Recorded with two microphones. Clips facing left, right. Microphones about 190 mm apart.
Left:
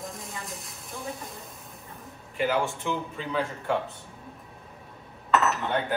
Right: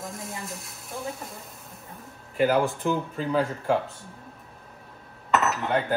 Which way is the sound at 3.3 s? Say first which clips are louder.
Right 4 dB; 35° right (ahead or behind).